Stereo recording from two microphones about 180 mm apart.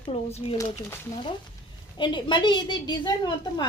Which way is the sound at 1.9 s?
25° left (ahead or behind).